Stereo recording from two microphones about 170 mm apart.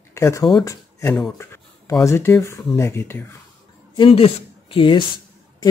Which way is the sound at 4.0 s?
35° left (ahead or behind).